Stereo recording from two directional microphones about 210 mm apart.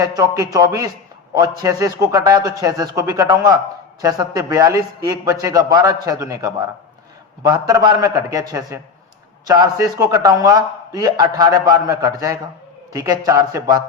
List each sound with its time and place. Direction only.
0.0 s a man's voice: 15° right (ahead or behind)
7.7 s a man's voice: 15° right (ahead or behind)